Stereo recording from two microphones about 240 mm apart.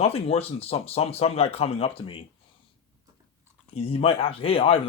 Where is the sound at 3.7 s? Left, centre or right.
Left.